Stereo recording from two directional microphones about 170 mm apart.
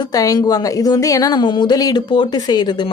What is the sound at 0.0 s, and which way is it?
A woman's voice, 20° left (ahead or behind).